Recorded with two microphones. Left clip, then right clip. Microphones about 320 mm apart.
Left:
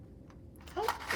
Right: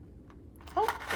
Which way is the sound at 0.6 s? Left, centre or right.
Centre.